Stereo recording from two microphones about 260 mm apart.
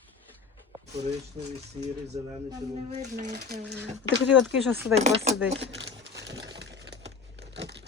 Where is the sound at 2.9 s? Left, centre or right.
Right.